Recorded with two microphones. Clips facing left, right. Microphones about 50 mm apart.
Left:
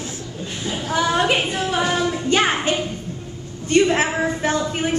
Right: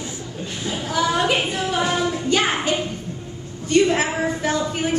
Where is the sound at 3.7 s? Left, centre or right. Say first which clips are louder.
Left 1 dB; left.